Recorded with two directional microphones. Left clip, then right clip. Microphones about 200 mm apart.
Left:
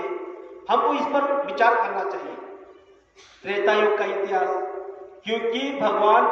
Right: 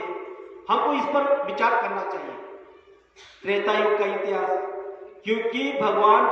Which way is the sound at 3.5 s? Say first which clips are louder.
Left 2 dB; 15° left (ahead or behind).